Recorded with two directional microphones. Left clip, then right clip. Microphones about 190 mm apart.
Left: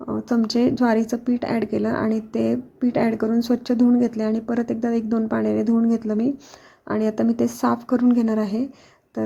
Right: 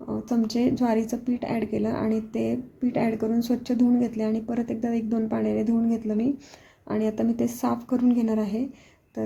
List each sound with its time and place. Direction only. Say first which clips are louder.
0.0 s speech: left 4 dB; 20° left (ahead or behind)